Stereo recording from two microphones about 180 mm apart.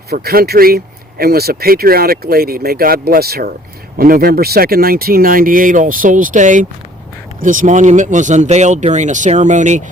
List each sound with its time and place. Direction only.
0.1 s speech: 60° right (ahead or behind); by 9.8 s 45° right (ahead or behind)